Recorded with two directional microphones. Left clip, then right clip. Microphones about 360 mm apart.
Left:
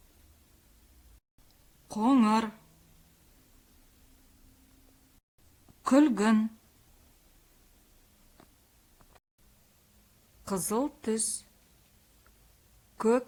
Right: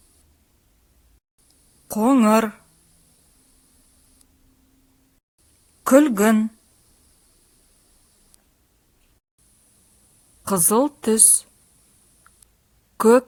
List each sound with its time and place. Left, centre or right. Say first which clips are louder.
1.9 s speech: right 9 dB; centre
5.8 s a woman's voice: right 9 dB; centre
10.4 s a woman's voice: right 12 dB; centre
13.0 s speech: right 12 dB; centre